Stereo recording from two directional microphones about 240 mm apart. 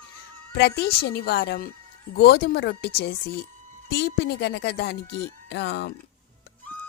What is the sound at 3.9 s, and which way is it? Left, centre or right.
Speech, left.